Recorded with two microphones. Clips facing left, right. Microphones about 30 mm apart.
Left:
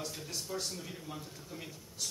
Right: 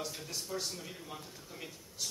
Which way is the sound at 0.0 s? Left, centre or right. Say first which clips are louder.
Even; centre.